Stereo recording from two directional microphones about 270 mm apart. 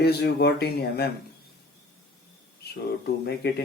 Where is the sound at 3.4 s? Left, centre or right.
Left.